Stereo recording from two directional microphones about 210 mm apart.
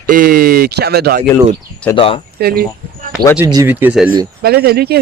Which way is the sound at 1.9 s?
25° left (ahead or behind).